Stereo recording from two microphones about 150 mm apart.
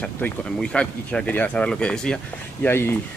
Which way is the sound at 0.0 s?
5° left (ahead or behind).